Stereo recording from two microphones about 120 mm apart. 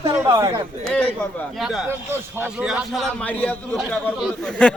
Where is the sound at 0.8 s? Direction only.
10° left (ahead or behind).